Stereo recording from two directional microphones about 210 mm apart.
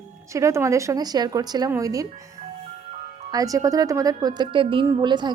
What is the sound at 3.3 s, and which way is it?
Speech, 15° right (ahead or behind).